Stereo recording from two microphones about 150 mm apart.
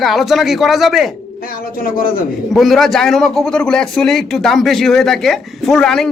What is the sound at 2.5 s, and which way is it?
Speech, centre (ahead or behind).